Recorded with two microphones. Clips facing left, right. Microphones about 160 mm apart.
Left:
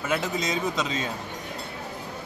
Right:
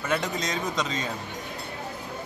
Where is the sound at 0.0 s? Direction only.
5° left (ahead or behind).